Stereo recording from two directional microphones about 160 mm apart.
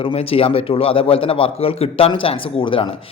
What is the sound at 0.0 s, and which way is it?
A man's voice, 35° left (ahead or behind).